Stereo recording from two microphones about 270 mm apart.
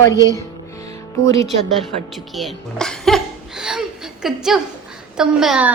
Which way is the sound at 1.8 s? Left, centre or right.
Centre.